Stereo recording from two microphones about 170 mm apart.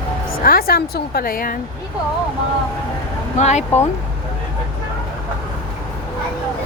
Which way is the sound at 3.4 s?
40° left (ahead or behind).